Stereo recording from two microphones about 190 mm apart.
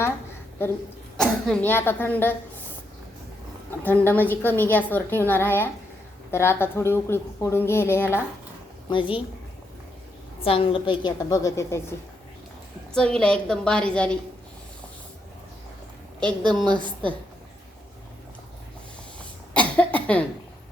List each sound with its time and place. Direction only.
1.1 s a woman's voice: 5° left (ahead or behind)
3.7 s a woman's voice: 10° left (ahead or behind)
8.9 s a woman's voice: 25° left (ahead or behind)
10.4 s a woman's voice: 30° left (ahead or behind)
12.9 s a woman's voice: 5° left (ahead or behind)
16.5 s a woman's voice: 5° left (ahead or behind)
19.5 s cough: 5° left (ahead or behind)